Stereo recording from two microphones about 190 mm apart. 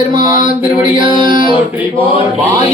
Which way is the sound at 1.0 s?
25° right (ahead or behind).